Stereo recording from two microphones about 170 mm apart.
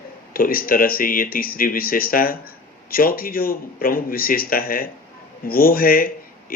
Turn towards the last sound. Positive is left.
turn(degrees=60)  # may be behind; listen again after turning